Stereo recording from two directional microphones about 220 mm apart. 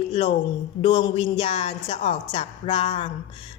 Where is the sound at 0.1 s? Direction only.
25° left (ahead or behind).